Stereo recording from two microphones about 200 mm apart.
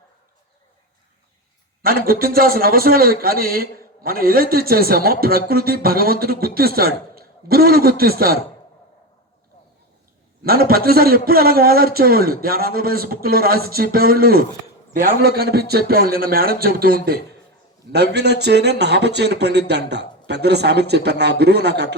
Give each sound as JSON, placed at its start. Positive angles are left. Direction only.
{"t": 1.8, "sound": "a man's voice", "side_deg": -45}
{"t": 10.4, "sound": "a man's voice", "side_deg": -50}